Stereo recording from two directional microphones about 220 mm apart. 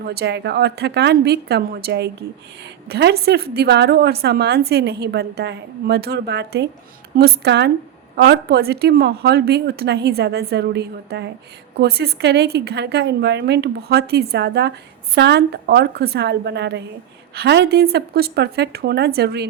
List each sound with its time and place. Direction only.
0.0 s a woman's voice: 45° right (ahead or behind)